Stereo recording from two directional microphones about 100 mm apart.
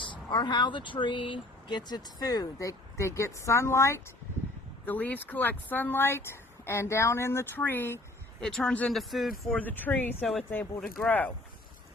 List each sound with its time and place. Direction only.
0.0 s speech: 50° left (ahead or behind); by 4.0 s 30° left (ahead or behind)
4.9 s speech: 15° left (ahead or behind)
8.4 s speech: 5° left (ahead or behind)
8.9 s speech: centre (ahead or behind)
9.6 s speech: 15° left (ahead or behind)
10.2 s speech: centre (ahead or behind)
10.5 s speech: 15° left (ahead or behind)